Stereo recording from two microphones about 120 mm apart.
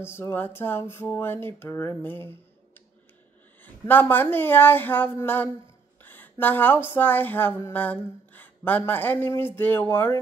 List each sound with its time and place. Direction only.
0.0 s speech: 20° left (ahead or behind)
3.6 s speech: 15° left (ahead or behind)